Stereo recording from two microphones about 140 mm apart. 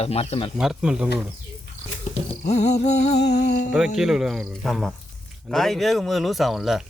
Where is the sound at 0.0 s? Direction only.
45° left (ahead or behind).